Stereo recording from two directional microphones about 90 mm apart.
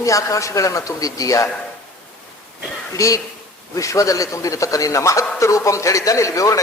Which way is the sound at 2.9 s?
35° left (ahead or behind).